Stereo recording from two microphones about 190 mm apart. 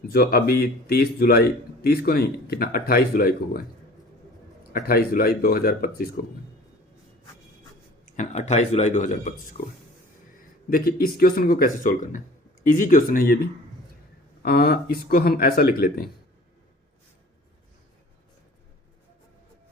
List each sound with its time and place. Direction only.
0.1 s a man's voice: 55° left (ahead or behind)
4.7 s a man's voice: 50° left (ahead or behind)
8.1 s speech: 40° left (ahead or behind)
10.7 s a man's voice: 50° left (ahead or behind)